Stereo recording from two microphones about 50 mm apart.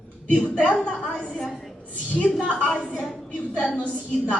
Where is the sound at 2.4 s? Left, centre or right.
Left.